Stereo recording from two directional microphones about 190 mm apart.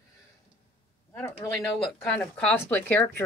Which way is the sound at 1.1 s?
15° left (ahead or behind).